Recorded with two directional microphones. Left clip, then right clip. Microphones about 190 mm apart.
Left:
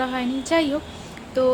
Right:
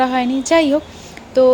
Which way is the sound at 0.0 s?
30° right (ahead or behind).